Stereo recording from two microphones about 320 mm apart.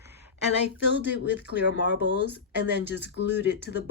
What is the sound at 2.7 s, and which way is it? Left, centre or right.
Speech, left.